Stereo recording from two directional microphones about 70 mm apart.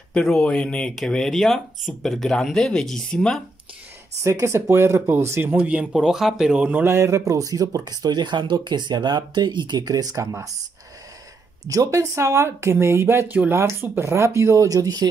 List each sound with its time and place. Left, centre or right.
0.1 s speech: centre
4.2 s speech: right
5.6 s speech: centre
6.0 s speech: centre
6.9 s speech: right
10.2 s speech: right
11.6 s speech: right